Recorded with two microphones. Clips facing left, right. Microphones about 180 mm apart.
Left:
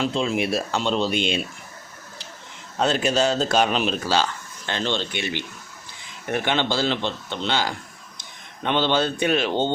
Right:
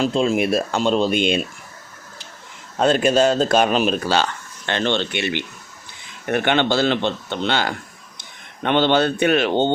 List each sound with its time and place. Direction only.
0.0 s a man's voice: 45° right (ahead or behind)
2.7 s a man's voice: 50° right (ahead or behind)